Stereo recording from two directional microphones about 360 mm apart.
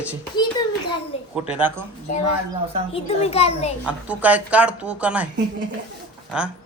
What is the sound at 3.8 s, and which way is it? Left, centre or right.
Speech, centre.